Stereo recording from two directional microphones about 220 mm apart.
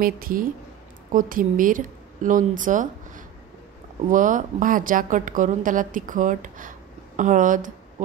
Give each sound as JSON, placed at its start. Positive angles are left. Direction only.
{"t": 0.0, "sound": "a woman's voice", "side_deg": -40}